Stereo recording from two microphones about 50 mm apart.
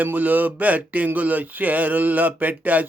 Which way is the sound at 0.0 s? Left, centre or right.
Right.